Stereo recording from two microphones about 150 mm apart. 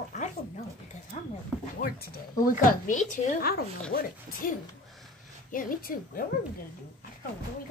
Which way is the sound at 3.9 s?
65° left (ahead or behind).